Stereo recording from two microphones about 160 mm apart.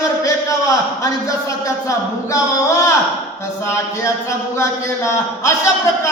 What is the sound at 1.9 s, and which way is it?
Speech, 20° left (ahead or behind).